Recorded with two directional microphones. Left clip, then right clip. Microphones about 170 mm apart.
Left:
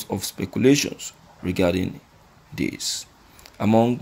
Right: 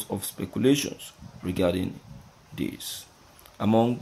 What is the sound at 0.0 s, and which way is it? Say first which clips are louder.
Speech: left 5 dB; 15° left (ahead or behind).